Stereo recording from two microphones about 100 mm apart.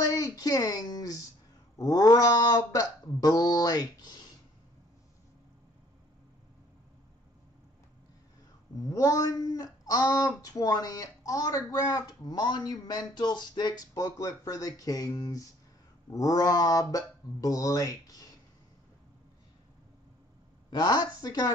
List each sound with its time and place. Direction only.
0.1 s speech: 35° left (ahead or behind)
1.8 s a sound: 40° left (ahead or behind)
8.8 s speech: 35° left (ahead or behind)
20.8 s speech: 40° left (ahead or behind)